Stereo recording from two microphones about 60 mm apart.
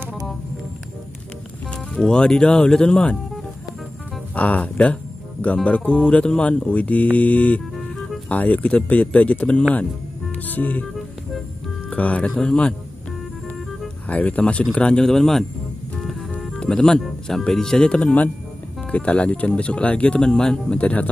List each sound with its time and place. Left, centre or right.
1.7 s speech: centre
4.4 s speech: left
11.9 s speech: left
14.0 s speech: left; by 15.4 s centre
16.0 s music: centre
16.5 s speech: centre